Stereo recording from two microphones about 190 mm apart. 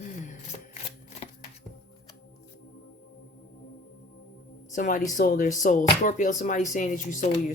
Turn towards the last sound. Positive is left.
turn(degrees=40)  # may be behind; listen again after turning